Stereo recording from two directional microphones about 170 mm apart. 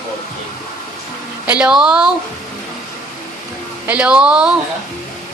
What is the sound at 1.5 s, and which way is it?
Speech, 5° right (ahead or behind).